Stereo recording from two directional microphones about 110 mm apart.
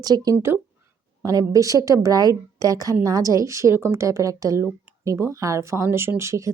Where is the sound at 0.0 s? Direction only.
35° right (ahead or behind).